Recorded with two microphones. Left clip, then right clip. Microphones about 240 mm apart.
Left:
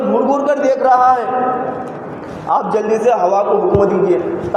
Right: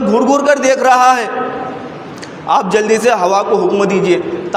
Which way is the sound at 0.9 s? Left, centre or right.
Right.